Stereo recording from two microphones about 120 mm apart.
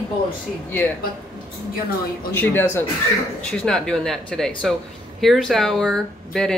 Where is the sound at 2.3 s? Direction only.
20° left (ahead or behind).